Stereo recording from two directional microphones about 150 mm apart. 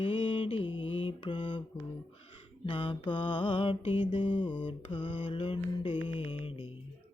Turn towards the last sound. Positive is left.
turn(degrees=40)  # may be behind; listen again after turning